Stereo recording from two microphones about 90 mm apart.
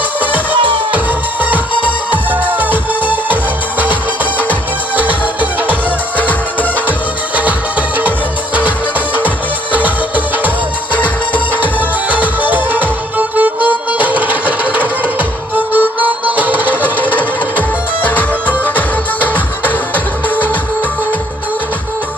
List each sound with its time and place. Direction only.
0.2 s music: 20° right (ahead or behind)
6.1 s music: 15° left (ahead or behind)
7.3 s music: 15° right (ahead or behind)
9.7 s music: 20° right (ahead or behind)
12.0 s music: 20° right (ahead or behind)
17.2 s music: 20° left (ahead or behind)